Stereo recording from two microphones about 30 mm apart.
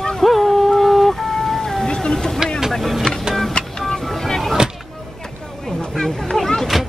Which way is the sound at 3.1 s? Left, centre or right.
Left.